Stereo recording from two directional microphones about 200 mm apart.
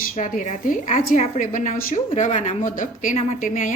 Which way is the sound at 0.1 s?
40° left (ahead or behind).